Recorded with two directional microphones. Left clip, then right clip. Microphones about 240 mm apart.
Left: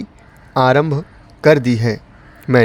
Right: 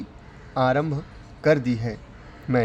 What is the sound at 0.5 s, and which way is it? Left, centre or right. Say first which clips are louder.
A man's voice: left 9 dB; left.